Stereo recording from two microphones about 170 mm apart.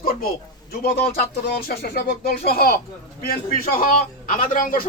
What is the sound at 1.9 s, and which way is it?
Speech, 65° left (ahead or behind).